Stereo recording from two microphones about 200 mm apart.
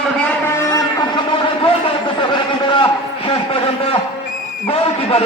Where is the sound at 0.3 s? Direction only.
15° left (ahead or behind).